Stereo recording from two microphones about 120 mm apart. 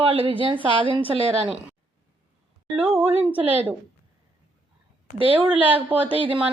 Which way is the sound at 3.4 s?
15° right (ahead or behind).